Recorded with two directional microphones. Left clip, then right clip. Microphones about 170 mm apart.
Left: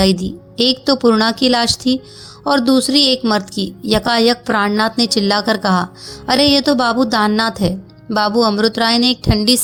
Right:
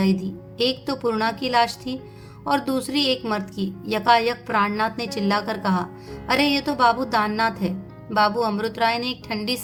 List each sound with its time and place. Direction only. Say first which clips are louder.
0.0 s a woman's voice: left 9 dB; 45° left (ahead or behind)